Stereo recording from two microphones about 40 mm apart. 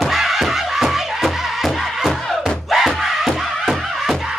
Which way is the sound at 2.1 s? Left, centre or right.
Centre.